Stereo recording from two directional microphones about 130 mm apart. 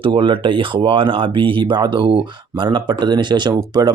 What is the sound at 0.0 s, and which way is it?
Speech, 40° right (ahead or behind).